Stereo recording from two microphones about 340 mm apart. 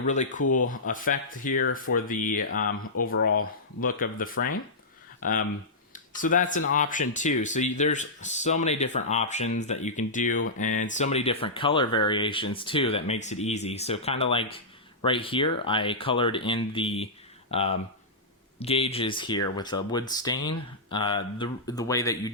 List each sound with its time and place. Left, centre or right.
0.0 s speech: left
2.6 s speech: left
3.0 s speech: left; by 22.3 s centre